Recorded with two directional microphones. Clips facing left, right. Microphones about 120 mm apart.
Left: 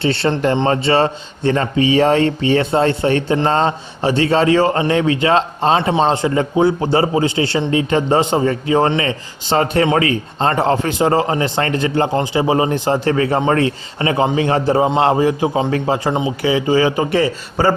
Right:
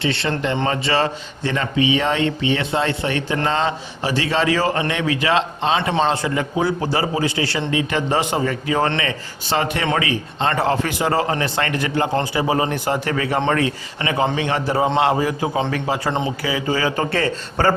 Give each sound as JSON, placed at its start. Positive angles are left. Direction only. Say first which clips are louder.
{"t": 0.0, "sound": "a man's voice", "louder": "left 5 dB", "side_deg": 30}